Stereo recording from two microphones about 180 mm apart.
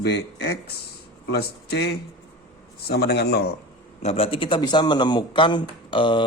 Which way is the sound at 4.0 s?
35° left (ahead or behind).